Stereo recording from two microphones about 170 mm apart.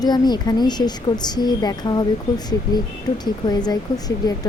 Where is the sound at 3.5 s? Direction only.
25° left (ahead or behind).